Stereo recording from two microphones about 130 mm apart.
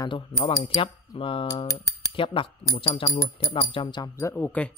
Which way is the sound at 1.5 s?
30° left (ahead or behind).